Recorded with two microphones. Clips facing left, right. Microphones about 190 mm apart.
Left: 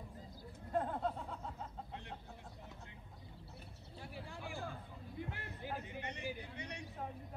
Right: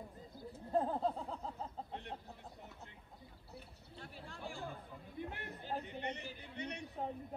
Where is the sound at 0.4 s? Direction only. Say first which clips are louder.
Right 3 dB; 30° right (ahead or behind).